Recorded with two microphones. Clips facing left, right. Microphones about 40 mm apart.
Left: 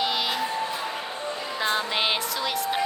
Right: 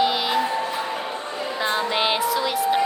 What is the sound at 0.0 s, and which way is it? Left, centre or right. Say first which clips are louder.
Music: right 5 dB; centre.